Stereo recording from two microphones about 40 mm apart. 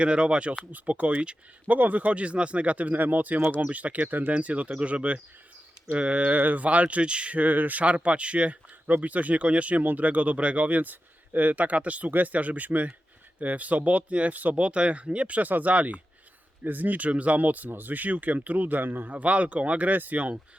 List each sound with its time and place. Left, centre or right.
0.0 s speech: right
0.6 s speech: right
1.0 s speech: right
1.6 s speech: right
6.4 s speech: right
6.7 s speech: right
17.7 s speech: right
19.1 s speech: right
19.9 s speech: right